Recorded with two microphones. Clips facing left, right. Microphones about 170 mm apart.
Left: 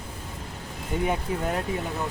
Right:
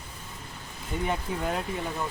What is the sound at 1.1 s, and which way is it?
Speech, centre (ahead or behind).